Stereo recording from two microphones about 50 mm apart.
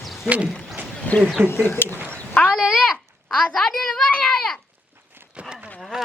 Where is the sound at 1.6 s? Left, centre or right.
Left.